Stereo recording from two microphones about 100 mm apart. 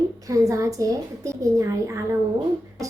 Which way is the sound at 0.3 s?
30° right (ahead or behind).